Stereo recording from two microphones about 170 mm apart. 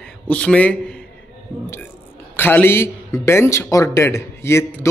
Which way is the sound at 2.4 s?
10° left (ahead or behind).